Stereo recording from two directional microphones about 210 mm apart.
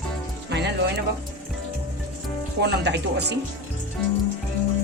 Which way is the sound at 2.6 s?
55° right (ahead or behind).